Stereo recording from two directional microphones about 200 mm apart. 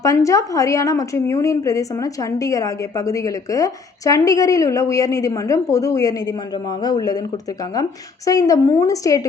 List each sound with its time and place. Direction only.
0.0 s a woman's voice: 15° left (ahead or behind)